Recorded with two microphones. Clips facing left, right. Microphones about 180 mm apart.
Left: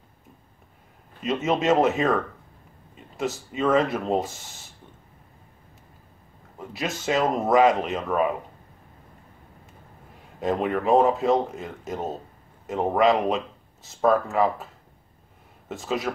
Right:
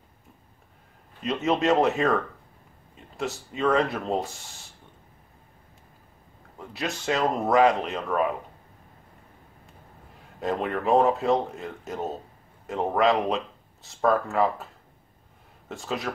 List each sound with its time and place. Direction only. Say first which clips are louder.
1.2 s speech: left 1 dB; centre (ahead or behind)
6.6 s speech: left 2 dB; centre (ahead or behind)
10.4 s speech: left 3 dB; centre (ahead or behind)
15.7 s speech: left 3 dB; centre (ahead or behind)